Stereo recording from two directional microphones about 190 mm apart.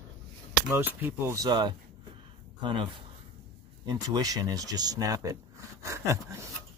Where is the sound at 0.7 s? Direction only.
10° right (ahead or behind).